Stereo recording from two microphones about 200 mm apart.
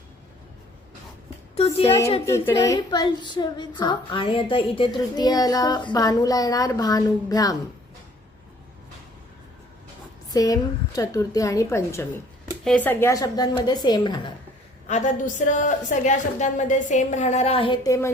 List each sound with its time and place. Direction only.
1.5 s a woman's voice: 30° left (ahead or behind)
2.5 s a woman's voice: 15° left (ahead or behind)
10.3 s a woman's voice: 20° left (ahead or behind)
14.8 s a woman's voice: 35° left (ahead or behind); by 18.1 s 15° left (ahead or behind)